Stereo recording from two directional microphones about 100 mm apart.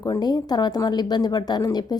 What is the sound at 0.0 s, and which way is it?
A woman's voice, 45° left (ahead or behind).